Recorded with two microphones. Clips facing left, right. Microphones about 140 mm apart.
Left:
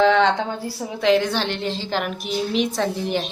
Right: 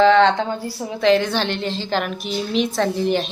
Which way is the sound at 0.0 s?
10° left (ahead or behind).